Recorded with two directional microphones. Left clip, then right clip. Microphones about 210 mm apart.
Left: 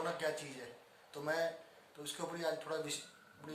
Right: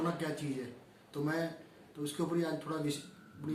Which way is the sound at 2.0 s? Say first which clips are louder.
Right 5 dB; 15° left (ahead or behind).